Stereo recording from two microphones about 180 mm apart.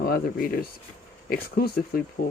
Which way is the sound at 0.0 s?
55° left (ahead or behind).